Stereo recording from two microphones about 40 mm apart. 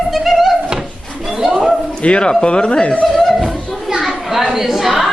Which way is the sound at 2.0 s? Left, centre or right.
Left.